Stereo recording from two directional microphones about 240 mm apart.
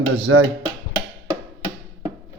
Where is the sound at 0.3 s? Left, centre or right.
Right.